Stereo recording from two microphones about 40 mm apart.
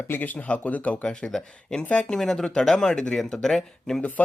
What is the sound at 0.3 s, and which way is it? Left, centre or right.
Speech, left.